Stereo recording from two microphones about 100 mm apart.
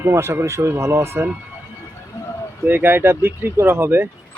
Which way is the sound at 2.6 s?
20° right (ahead or behind).